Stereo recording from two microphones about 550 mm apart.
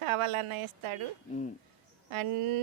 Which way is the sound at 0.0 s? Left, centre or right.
Right.